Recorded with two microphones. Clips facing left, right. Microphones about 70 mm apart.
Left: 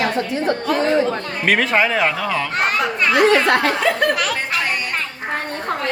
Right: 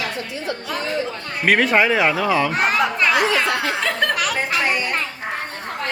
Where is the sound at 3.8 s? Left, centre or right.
Centre.